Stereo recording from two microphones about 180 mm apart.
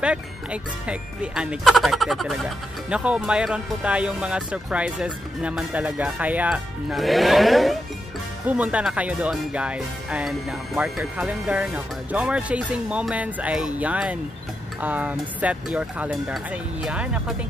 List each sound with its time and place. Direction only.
0.0 s speech: 5° right (ahead or behind)